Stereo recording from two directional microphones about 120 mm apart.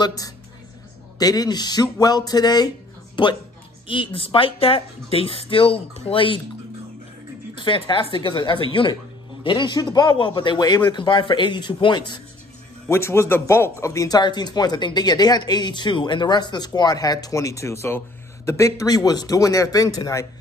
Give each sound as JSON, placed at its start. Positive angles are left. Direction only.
{"t": 0.0, "sound": "speech", "side_deg": 30}
{"t": 7.5, "sound": "speech", "side_deg": 45}
{"t": 12.9, "sound": "speech", "side_deg": 20}